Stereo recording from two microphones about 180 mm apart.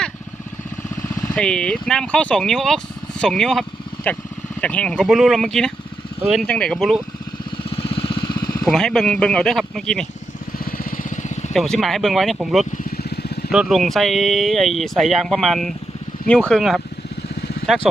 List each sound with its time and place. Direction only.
1.0 s a sound: 20° left (ahead or behind)
1.4 s speech: 5° left (ahead or behind)
7.7 s vehicle: 30° left (ahead or behind)
8.6 s speech: 5° left (ahead or behind)
10.6 s lawn mower: 55° left (ahead or behind)
11.5 s speech: centre (ahead or behind)
12.7 s vehicle: 55° left (ahead or behind)
13.5 s speech: centre (ahead or behind)